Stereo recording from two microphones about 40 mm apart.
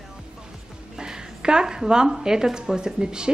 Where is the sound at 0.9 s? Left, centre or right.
Centre.